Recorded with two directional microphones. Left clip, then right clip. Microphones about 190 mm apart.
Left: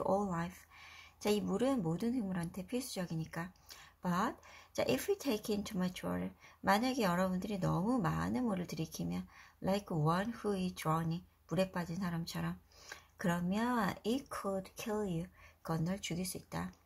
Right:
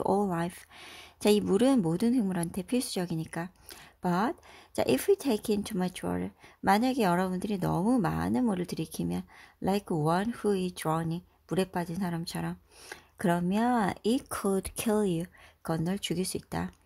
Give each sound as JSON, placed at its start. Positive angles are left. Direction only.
{"t": 0.0, "sound": "speech", "side_deg": -45}